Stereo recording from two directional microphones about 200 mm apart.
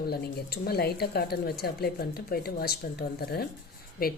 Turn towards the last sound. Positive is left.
turn(degrees=50)  # may be behind; listen again after turning